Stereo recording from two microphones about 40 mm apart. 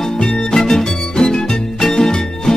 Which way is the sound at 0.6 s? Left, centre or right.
Centre.